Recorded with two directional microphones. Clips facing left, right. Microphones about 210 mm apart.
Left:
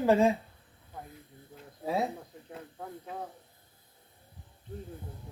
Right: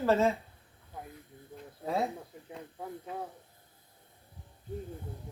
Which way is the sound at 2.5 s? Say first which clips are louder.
Even; 5° right (ahead or behind).